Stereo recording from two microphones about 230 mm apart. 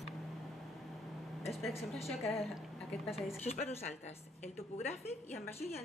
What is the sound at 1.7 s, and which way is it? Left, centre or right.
Speech, left.